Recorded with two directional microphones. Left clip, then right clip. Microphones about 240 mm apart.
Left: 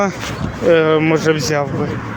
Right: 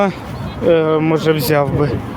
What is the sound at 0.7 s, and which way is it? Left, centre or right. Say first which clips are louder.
Speech: left 1 dB; centre.